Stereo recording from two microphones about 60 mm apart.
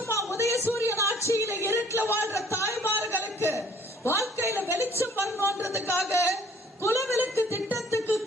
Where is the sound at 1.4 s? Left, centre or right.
Right.